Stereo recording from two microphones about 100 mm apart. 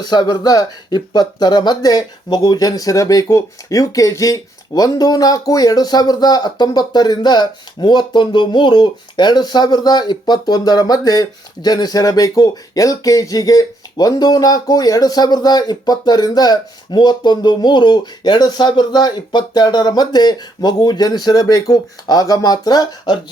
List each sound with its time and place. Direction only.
0.0 s speech: 45° left (ahead or behind)